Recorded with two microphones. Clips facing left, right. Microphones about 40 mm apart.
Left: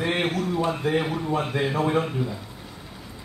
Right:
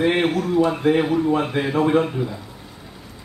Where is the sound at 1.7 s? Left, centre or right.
Right.